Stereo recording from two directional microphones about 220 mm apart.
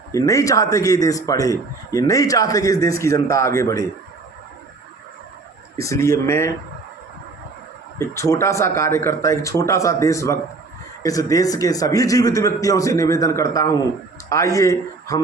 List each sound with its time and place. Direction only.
0.1 s a man's voice: 15° left (ahead or behind)
5.7 s a man's voice: 15° left (ahead or behind)
7.9 s a man's voice: 15° left (ahead or behind)